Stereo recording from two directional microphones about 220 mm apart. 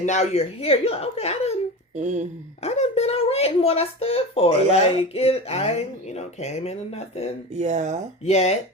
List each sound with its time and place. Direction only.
0.0 s speech: 30° left (ahead or behind)
2.0 s speech: 35° right (ahead or behind)
2.6 s speech: 30° left (ahead or behind)
7.5 s speech: 30° right (ahead or behind)
8.2 s speech: 30° left (ahead or behind)